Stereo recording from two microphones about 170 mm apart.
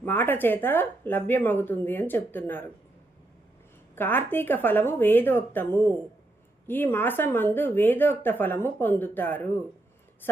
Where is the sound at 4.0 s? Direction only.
10° left (ahead or behind).